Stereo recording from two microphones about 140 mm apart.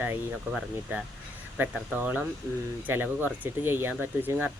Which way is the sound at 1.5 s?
15° right (ahead or behind).